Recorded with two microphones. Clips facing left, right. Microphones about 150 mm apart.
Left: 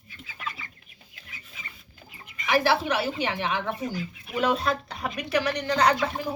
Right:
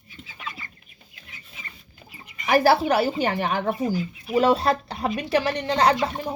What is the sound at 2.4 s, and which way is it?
Speech, 40° right (ahead or behind).